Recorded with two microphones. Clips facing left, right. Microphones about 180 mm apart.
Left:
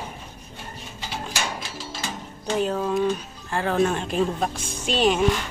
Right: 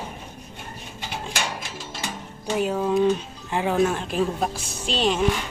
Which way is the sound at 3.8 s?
Centre (ahead or behind).